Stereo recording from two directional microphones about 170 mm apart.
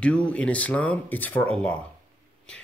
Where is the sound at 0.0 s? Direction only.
5° left (ahead or behind).